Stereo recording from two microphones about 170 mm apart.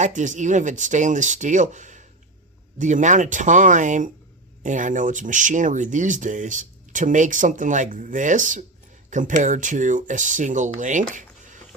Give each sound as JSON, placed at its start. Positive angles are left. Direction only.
{"t": 0.0, "sound": "speech", "side_deg": -45}